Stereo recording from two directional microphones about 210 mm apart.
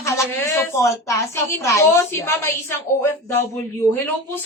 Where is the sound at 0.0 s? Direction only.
15° left (ahead or behind).